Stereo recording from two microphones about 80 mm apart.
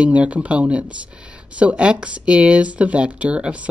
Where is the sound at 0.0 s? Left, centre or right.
Centre.